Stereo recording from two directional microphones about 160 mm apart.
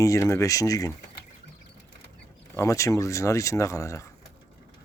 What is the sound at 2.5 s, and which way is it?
Speech, 20° left (ahead or behind).